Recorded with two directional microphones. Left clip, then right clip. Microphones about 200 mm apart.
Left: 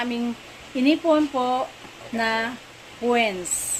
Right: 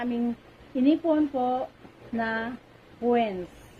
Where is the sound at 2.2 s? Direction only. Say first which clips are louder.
Left 6 dB; 15° left (ahead or behind).